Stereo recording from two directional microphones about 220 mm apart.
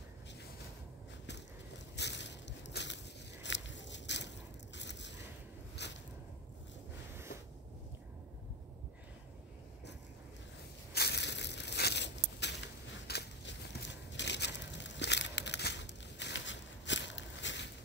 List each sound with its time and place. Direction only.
2.0 s crushing: 50° left (ahead or behind)
3.4 s a sound: 55° left (ahead or behind)
10.9 s crushing: 50° left (ahead or behind)